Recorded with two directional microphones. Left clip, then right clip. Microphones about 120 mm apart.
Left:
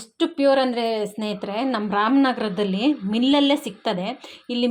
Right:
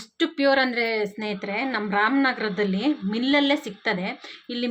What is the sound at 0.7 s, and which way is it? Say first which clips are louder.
Speech: left 1 dB; 20° left (ahead or behind).